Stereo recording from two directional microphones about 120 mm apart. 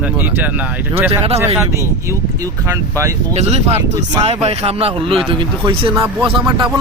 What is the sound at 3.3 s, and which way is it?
A man's voice, 65° right (ahead or behind).